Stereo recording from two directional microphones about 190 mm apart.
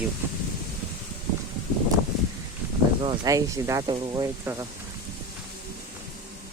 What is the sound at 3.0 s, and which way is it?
Speech, 20° right (ahead or behind).